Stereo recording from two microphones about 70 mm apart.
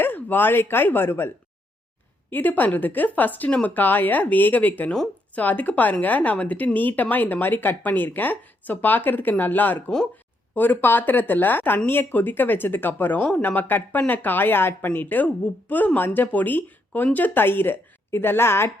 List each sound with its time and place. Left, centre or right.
0.0 s speech: left
2.3 s speech: left